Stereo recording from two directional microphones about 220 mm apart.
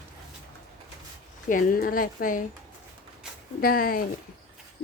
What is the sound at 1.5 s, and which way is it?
Speech, 40° left (ahead or behind).